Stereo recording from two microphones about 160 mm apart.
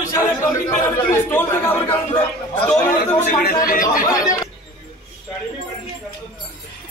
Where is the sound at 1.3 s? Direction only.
15° left (ahead or behind).